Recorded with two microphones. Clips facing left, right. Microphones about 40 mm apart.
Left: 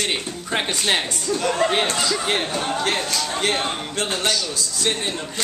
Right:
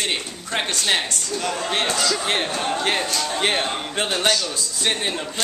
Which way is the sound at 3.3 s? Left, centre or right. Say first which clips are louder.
Right 1 dB; centre.